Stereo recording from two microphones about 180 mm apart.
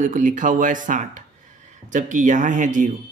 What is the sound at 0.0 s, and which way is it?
Speech, 45° right (ahead or behind).